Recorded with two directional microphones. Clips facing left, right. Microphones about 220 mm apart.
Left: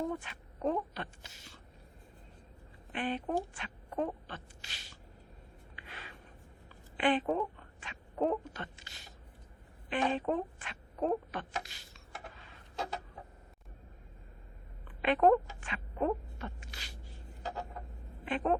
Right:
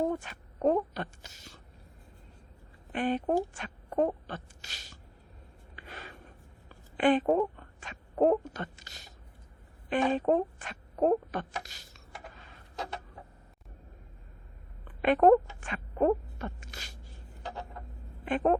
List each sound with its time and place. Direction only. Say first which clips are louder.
0.2 s a woman's voice: right 6 dB; 45° right (ahead or behind)
2.9 s speech: right 6 dB; 45° right (ahead or behind)
5.7 s writing: right 5 dB; 45° right (ahead or behind)
6.9 s a sound: right 6 dB; 45° right (ahead or behind)
9.9 s speech: right 6 dB; 45° right (ahead or behind)
15.0 s speech: right 5 dB; 45° right (ahead or behind)
15.6 s a sound: right 6 dB; 45° right (ahead or behind)
17.4 s a sound: even; 5° left (ahead or behind)
18.3 s speech: right 5 dB; 45° right (ahead or behind)